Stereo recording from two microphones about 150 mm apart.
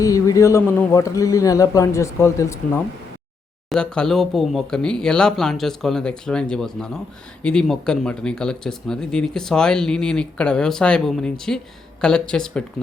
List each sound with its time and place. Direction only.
0.0 s speech: 20° left (ahead or behind)
3.7 s speech: 5° left (ahead or behind)